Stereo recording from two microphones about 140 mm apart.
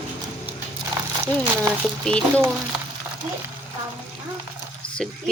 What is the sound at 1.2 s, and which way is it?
Speech, 10° left (ahead or behind).